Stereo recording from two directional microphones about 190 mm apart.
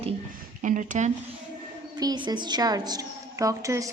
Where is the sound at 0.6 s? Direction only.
40° right (ahead or behind).